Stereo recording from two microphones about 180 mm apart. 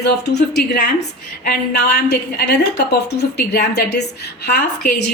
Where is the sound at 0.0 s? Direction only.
70° left (ahead or behind).